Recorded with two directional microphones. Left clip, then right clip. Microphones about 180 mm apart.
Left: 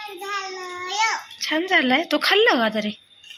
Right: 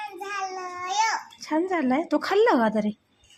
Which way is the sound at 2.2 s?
15° right (ahead or behind).